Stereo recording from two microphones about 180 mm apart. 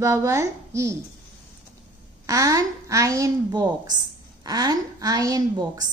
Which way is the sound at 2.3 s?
20° right (ahead or behind).